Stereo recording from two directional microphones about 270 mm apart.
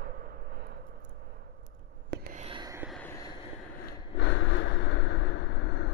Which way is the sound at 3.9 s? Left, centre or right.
Left.